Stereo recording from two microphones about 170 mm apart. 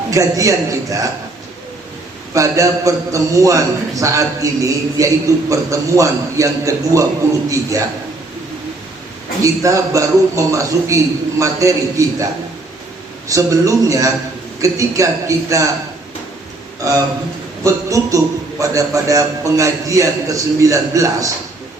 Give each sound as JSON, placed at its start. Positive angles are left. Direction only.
{"t": 0.1, "sound": "a man's voice", "side_deg": -20}
{"t": 2.3, "sound": "a man's voice", "side_deg": -20}
{"t": 9.4, "sound": "a man's voice", "side_deg": -20}
{"t": 17.6, "sound": "a man's voice", "side_deg": -20}